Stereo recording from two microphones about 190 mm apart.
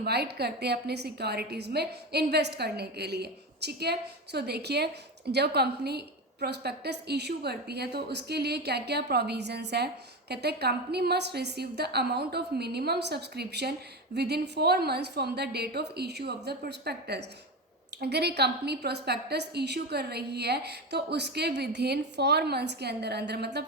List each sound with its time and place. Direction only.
0.0 s a woman's voice: 55° right (ahead or behind)